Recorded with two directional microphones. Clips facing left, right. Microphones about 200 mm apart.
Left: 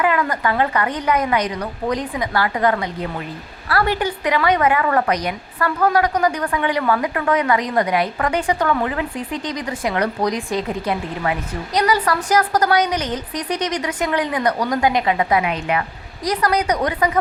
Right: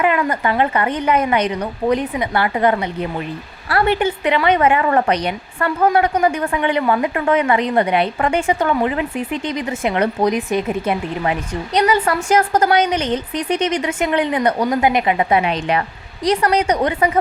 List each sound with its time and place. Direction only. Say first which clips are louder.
0.0 s a woman's voice: right 2 dB; 20° right (ahead or behind)